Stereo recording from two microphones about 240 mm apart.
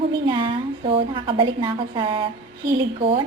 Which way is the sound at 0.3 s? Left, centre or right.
Right.